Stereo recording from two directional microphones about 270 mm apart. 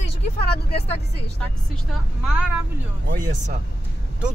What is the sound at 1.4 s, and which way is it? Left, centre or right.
Speech, centre.